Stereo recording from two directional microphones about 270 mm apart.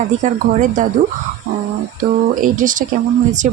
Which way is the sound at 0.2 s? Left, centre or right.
Right.